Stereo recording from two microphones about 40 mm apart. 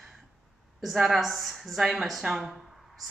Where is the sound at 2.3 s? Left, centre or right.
Centre.